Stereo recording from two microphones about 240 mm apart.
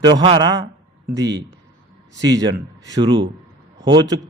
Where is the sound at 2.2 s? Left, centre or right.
Centre.